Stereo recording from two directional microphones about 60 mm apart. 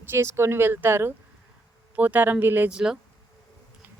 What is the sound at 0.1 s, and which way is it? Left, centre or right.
Speech, right.